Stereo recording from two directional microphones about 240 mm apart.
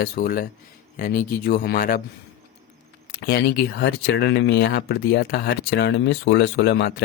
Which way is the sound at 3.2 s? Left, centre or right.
Left.